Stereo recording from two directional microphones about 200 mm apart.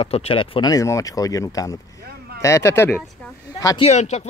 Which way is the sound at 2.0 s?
50° right (ahead or behind).